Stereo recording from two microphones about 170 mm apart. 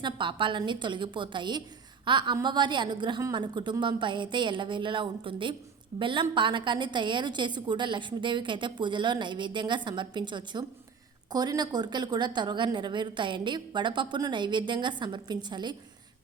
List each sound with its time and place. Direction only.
0.0 s a woman's voice: 30° right (ahead or behind)